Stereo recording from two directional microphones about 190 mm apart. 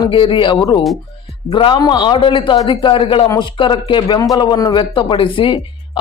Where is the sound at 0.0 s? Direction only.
25° left (ahead or behind).